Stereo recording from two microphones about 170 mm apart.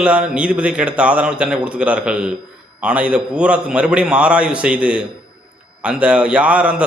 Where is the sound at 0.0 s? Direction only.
5° right (ahead or behind).